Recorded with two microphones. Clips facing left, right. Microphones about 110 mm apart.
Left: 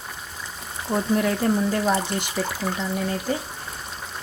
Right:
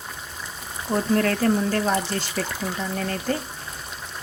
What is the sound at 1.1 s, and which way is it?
Speech, 15° left (ahead or behind).